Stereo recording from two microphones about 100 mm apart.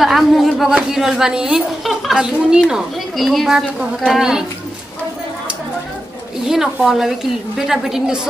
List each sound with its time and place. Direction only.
0.0 s a woman's voice: centre (ahead or behind)
6.4 s a woman's voice: 5° right (ahead or behind)